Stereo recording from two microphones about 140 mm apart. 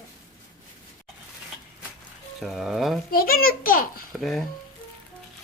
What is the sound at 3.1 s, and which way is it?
Speech, 90° left.